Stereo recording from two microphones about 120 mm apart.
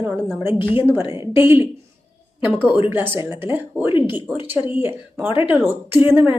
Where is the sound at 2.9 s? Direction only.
20° right (ahead or behind).